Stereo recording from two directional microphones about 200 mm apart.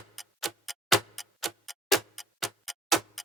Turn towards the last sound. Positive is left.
turn(degrees=0)  # may be behind; listen again after turning